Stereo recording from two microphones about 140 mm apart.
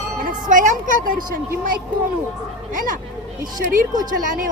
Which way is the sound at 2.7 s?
75° right (ahead or behind).